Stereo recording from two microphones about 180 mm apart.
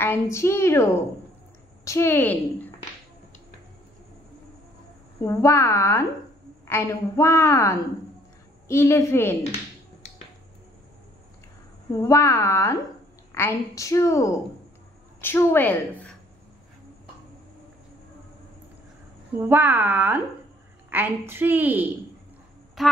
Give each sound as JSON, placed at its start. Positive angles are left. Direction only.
{"t": 0.0, "sound": "a woman's voice", "side_deg": 15}
{"t": 1.9, "sound": "a woman's voice", "side_deg": 15}
{"t": 5.2, "sound": "a woman's voice", "side_deg": 15}
{"t": 12.0, "sound": "a woman's voice", "side_deg": 15}
{"t": 19.5, "sound": "a woman's voice", "side_deg": -10}